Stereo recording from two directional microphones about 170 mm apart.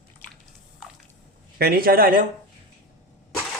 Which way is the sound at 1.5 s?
60° right (ahead or behind).